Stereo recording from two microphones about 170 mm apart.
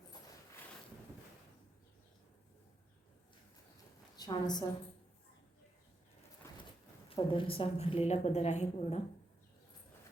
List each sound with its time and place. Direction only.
4.2 s a woman's voice: 25° left (ahead or behind)
6.4 s a sound: 15° left (ahead or behind)
7.1 s a woman's voice: 30° left (ahead or behind)